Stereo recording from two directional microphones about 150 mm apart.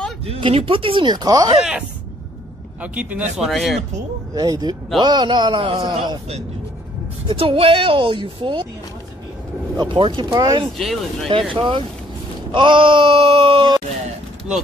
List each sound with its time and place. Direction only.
0.3 s a woman's voice: 40° right (ahead or behind)
1.6 s speech: 5° right (ahead or behind)
4.4 s a man's voice: 25° right (ahead or behind)
7.2 s a woman's voice: 35° right (ahead or behind)
9.8 s a woman's voice: 30° right (ahead or behind)
10.8 s speech: centre (ahead or behind)
11.5 s a woman's voice: 35° right (ahead or behind)